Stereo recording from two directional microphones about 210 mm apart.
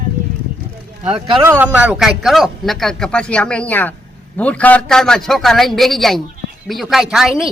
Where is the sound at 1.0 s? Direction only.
25° right (ahead or behind).